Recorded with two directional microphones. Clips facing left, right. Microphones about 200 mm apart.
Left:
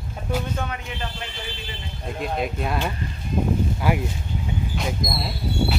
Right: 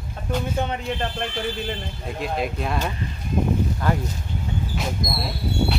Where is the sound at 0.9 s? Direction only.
55° right (ahead or behind).